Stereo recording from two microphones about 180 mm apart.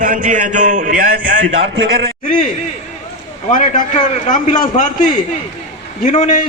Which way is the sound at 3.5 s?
45° left (ahead or behind).